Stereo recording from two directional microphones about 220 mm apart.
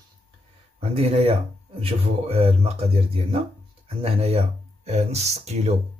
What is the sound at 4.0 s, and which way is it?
Speech, 25° right (ahead or behind).